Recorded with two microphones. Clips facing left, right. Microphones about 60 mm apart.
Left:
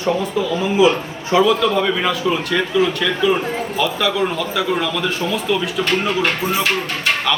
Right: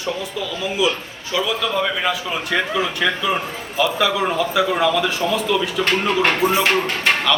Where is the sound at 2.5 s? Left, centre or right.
Centre.